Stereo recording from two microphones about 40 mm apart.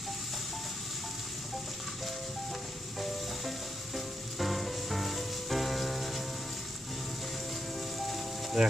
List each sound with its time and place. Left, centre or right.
3.9 s music: centre
7.9 s music: centre
8.6 s speech: centre